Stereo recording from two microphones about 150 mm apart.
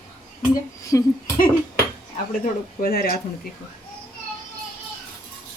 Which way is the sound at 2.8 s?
80° left.